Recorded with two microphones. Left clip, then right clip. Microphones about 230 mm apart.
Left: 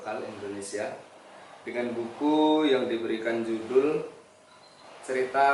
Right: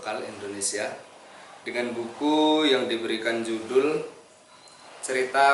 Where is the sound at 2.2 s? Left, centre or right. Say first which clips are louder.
Right 2 dB; left.